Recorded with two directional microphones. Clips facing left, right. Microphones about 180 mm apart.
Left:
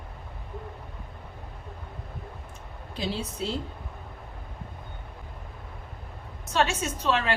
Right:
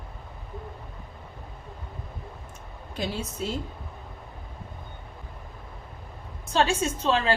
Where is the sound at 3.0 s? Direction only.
45° right (ahead or behind).